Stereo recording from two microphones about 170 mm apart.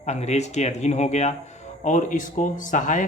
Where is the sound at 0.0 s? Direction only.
40° left (ahead or behind).